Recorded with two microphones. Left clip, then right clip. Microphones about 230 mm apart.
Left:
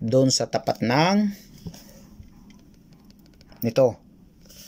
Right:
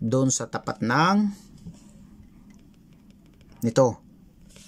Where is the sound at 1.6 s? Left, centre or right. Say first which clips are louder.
Left 7 dB; left.